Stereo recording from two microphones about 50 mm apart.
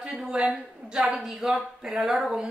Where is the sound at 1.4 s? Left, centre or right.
Centre.